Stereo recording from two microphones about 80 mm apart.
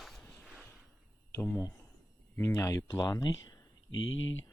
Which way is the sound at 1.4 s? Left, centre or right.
Left.